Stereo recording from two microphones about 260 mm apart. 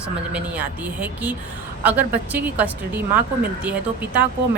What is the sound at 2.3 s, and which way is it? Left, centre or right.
Speech, centre.